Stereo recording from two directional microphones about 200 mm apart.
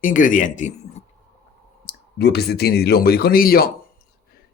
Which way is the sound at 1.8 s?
55° left (ahead or behind).